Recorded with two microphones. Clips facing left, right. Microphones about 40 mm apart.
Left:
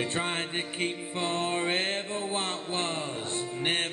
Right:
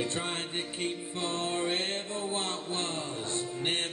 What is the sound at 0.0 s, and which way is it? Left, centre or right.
Music, left.